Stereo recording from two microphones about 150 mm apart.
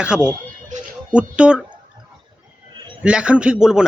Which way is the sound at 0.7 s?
55° right (ahead or behind).